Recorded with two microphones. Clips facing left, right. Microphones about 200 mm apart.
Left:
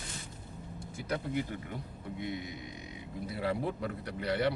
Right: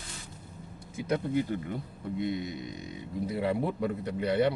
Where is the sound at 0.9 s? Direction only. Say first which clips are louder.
Right 6 dB; 20° right (ahead or behind).